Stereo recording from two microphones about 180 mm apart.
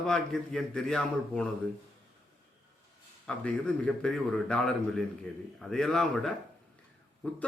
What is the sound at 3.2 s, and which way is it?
A man's voice, 5° left (ahead or behind).